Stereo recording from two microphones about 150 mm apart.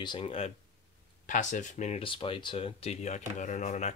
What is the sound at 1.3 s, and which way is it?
Speech, 55° left (ahead or behind).